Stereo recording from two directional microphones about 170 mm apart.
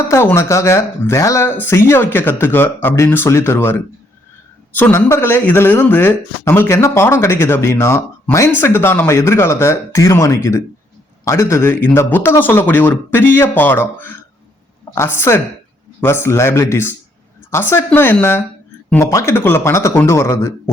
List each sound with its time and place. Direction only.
0.1 s speech: 15° left (ahead or behind)